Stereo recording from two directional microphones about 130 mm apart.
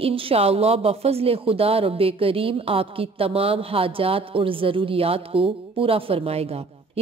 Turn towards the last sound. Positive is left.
turn(degrees=-50)  # may be behind; listen again after turning